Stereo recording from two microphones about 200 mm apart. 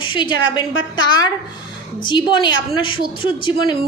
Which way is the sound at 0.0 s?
25° left (ahead or behind).